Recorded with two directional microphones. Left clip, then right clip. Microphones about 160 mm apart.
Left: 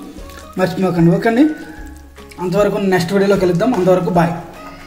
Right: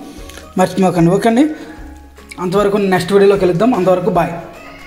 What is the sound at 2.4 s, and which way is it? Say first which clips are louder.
Speech: right 1 dB; 40° right (ahead or behind).